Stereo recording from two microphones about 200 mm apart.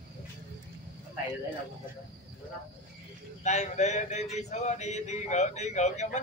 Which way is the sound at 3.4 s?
35° left (ahead or behind).